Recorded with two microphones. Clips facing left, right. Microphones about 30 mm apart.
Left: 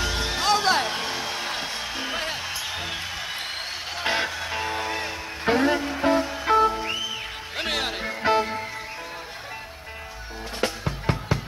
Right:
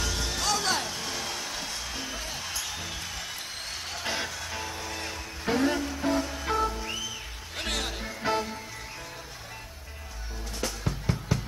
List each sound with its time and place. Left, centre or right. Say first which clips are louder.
0.0 s music: left 5 dB; left
0.8 s music: left 7 dB; left
1.1 s music: left 5 dB; left
6.2 s music: left 8 dB; left
10.6 s music: left 6 dB; left